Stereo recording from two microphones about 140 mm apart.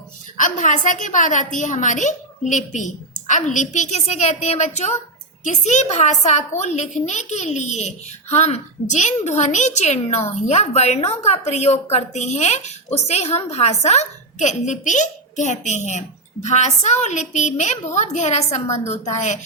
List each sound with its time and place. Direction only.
0.3 s a woman's voice: 65° left (ahead or behind)